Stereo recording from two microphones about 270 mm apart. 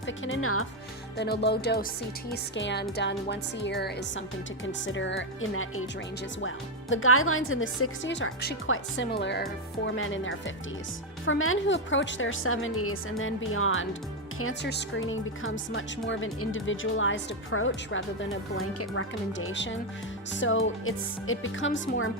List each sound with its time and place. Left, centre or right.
0.3 s speech: left
1.1 s speech: left
6.9 s speech: left